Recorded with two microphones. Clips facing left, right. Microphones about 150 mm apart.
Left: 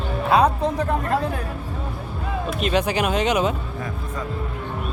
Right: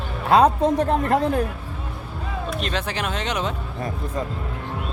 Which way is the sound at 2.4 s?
10° left (ahead or behind).